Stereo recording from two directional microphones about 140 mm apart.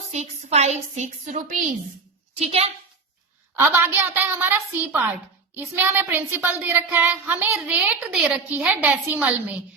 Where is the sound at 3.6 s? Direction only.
15° right (ahead or behind).